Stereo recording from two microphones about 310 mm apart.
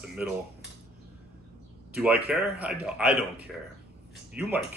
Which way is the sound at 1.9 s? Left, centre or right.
Centre.